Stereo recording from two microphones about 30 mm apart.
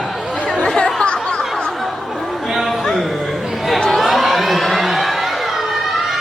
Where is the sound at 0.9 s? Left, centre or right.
Left.